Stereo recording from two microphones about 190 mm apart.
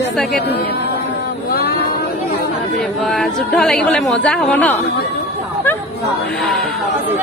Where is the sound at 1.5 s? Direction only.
55° left (ahead or behind).